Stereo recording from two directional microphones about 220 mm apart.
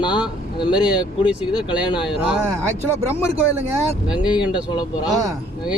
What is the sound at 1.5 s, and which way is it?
Speech, 20° left (ahead or behind).